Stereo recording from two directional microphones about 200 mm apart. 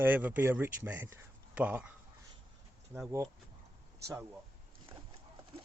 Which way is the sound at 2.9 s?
10° right (ahead or behind).